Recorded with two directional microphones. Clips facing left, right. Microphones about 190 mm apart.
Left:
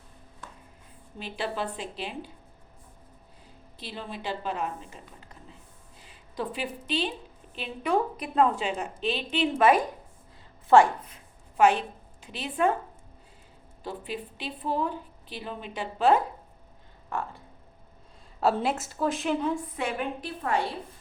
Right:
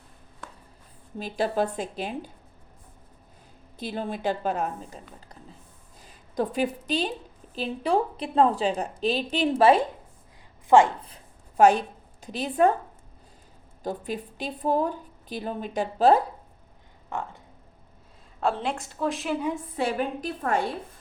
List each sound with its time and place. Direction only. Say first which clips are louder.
1.2 s a woman's voice: right 6 dB; 45° right (ahead or behind)
3.8 s a woman's voice: right 7 dB; 50° right (ahead or behind); by 9.8 s 30° right (ahead or behind)
11.0 s a sound: right 1 dB; 35° right (ahead or behind)
12.2 s a woman's voice: right 4 dB; 40° right (ahead or behind)
13.8 s a woman's voice: right 4 dB; 45° right (ahead or behind)
17.1 s speech: even; 20° right (ahead or behind)
18.3 s a woman's voice: left 2 dB; 5° left (ahead or behind)
19.7 s a woman's voice: right 4 dB; 35° right (ahead or behind)